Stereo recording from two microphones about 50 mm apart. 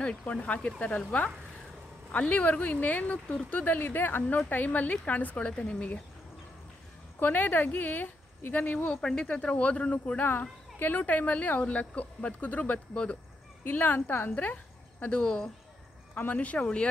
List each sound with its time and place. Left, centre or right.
0.3 s a woman's voice: left
5.7 s speech: left
7.2 s a woman's voice: left
9.0 s speech: centre
9.3 s a woman's voice: left
13.7 s a woman's voice: left
14.4 s a woman's voice: left
16.5 s speech: centre